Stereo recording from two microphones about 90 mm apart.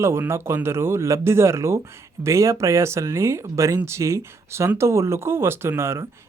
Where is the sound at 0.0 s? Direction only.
30° right (ahead or behind).